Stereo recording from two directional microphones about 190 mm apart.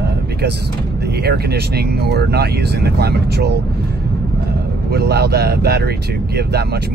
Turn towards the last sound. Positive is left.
turn(degrees=-60)  # may be behind; listen again after turning